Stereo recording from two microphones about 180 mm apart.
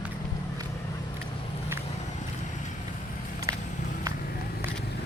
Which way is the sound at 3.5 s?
20° right (ahead or behind).